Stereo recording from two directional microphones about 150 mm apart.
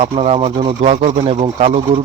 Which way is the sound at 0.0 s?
45° right (ahead or behind).